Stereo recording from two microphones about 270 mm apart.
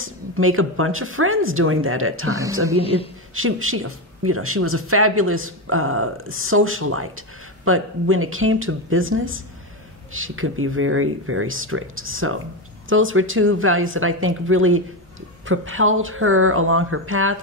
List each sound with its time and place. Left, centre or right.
0.0 s speech: right